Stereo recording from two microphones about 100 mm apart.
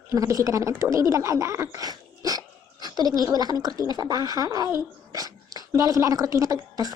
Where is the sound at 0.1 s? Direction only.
30° right (ahead or behind).